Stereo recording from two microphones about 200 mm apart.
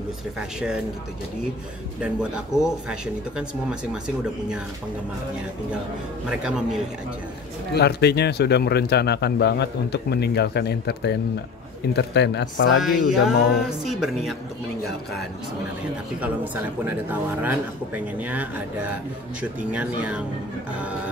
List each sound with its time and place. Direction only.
0.4 s speech: 5° right (ahead or behind)
2.0 s speech: 5° right (ahead or behind)
6.2 s speech: 5° right (ahead or behind)
7.7 s speech: 55° left (ahead or behind)
13.0 s mantra: 50° left (ahead or behind)
13.7 s speech: centre (ahead or behind)
16.2 s a man's voice: 10° right (ahead or behind)
20.0 s a man's voice: 5° right (ahead or behind)